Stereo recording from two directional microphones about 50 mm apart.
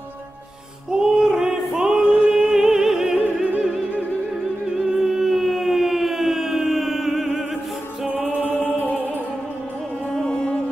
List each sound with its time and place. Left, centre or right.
0.9 s music: centre
3.2 s opera: right
4.7 s siren: centre
8.6 s music: left
10.1 s music: centre